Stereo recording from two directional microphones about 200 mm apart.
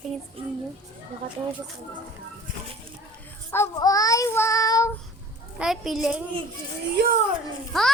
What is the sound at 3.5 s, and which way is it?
Child singing, 15° left (ahead or behind).